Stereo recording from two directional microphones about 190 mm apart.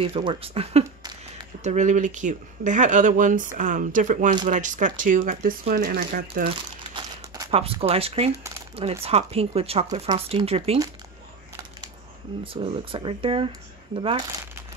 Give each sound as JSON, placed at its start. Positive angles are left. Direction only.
{"t": 0.0, "sound": "speech", "side_deg": -30}
{"t": 6.8, "sound": "crumpling", "side_deg": -25}
{"t": 9.0, "sound": "speech", "side_deg": -30}
{"t": 12.5, "sound": "speech", "side_deg": -30}